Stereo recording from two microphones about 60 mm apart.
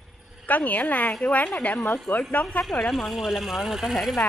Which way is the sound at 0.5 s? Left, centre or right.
Left.